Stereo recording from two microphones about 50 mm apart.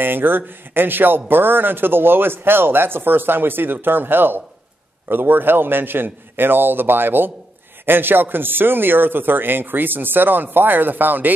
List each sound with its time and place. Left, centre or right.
0.0 s speech: right